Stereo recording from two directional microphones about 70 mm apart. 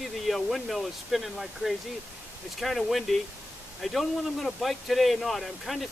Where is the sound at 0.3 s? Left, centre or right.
Centre.